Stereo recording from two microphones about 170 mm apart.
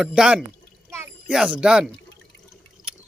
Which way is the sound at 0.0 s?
5° right (ahead or behind).